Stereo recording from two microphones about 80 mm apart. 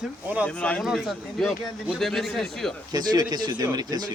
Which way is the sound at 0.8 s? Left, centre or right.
Centre.